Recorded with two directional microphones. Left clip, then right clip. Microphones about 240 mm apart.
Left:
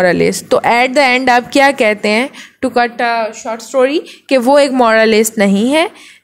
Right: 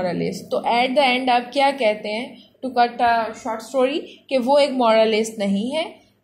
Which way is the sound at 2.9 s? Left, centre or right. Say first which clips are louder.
Left 4 dB; left.